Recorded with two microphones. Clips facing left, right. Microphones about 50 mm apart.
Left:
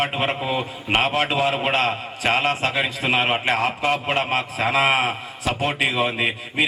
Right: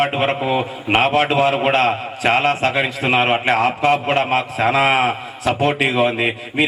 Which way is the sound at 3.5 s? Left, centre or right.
Right.